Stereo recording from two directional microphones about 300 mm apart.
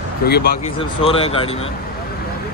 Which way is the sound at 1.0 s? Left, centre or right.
Centre.